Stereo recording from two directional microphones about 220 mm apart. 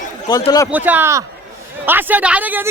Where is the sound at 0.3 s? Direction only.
15° left (ahead or behind).